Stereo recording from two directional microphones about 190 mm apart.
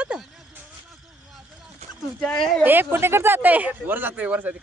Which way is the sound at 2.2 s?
5° left (ahead or behind).